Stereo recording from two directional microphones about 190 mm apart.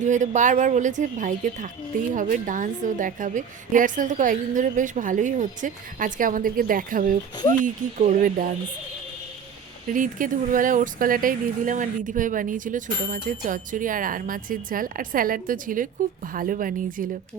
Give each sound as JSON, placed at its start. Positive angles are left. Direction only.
{"t": 0.0, "sound": "speech", "side_deg": -40}
{"t": 9.9, "sound": "speech", "side_deg": -45}